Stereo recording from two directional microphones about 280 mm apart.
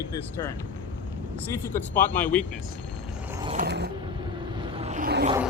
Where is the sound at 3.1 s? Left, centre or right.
Centre.